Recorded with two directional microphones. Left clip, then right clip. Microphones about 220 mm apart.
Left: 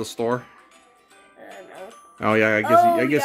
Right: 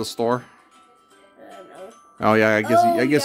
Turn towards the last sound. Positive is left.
turn(degrees=-15)  # may be behind; listen again after turning